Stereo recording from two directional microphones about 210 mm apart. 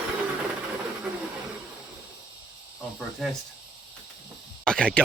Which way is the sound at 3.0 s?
Centre (ahead or behind).